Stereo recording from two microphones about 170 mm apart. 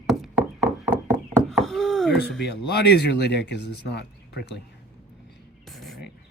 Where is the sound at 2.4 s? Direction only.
75° left (ahead or behind).